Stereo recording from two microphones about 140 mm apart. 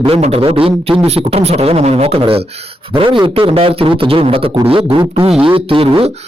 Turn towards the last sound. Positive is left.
turn(degrees=-40)  # may be behind; listen again after turning